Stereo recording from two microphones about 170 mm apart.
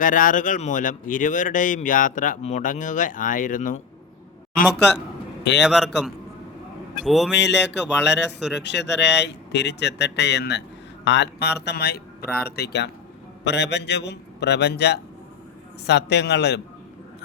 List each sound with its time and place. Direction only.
0.0 s speech: 50° left (ahead or behind)
5.6 s a man's voice: centre (ahead or behind)
7.3 s speech: 90° left; by 12.9 s 75° left (ahead or behind)
13.4 s a man's voice: 90° left